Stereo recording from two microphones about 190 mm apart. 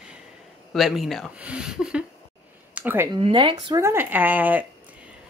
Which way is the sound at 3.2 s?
25° right (ahead or behind).